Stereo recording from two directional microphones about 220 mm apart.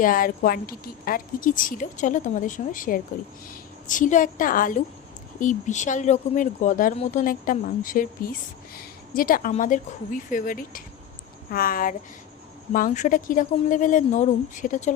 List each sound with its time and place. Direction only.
0.0 s speech: 40° left (ahead or behind)